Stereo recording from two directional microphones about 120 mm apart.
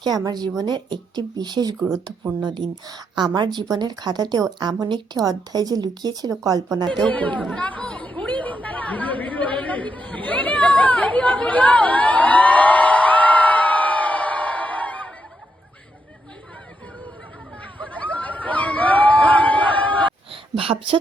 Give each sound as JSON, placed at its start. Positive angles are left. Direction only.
{"t": 0.0, "sound": "a woman's voice", "side_deg": -35}
{"t": 7.0, "sound": "chatter", "side_deg": 10}
{"t": 17.8, "sound": "a sound", "side_deg": 10}
{"t": 20.3, "sound": "speech", "side_deg": -50}